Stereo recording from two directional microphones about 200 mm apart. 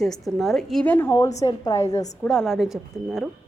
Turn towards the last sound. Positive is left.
turn(degrees=0)  # may be behind; listen again after turning